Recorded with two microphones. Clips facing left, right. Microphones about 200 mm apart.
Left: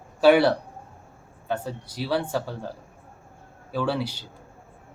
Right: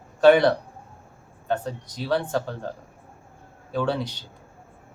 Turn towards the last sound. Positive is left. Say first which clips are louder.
# right 1 dB
turn(degrees=5)  # may be behind; listen again after turning